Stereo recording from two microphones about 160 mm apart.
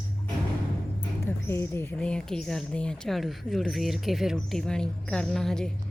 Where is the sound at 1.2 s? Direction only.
15° left (ahead or behind).